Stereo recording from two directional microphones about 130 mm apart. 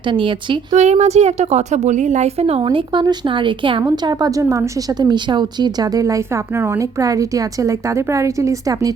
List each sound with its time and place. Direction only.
0.1 s speech: 40° right (ahead or behind)
0.7 s a woman's voice: 60° right (ahead or behind)
2.6 s speech: 35° right (ahead or behind)
3.8 s a woman's voice: 30° right (ahead or behind)